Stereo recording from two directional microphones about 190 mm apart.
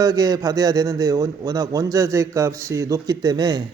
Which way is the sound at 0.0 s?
20° right (ahead or behind).